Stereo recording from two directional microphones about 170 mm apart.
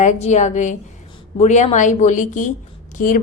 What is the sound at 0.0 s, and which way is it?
A woman's voice, 45° left (ahead or behind).